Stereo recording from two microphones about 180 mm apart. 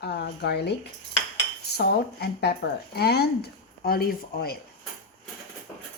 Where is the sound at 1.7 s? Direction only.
65° left (ahead or behind).